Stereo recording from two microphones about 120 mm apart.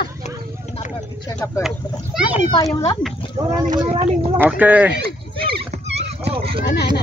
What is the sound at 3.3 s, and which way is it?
Speech, 30° right (ahead or behind).